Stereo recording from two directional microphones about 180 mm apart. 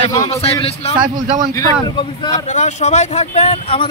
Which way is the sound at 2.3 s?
40° left (ahead or behind).